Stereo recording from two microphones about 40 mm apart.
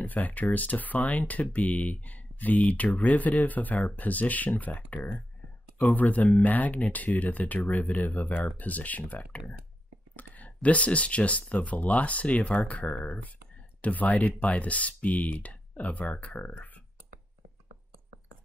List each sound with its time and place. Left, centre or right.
0.0 s speech: left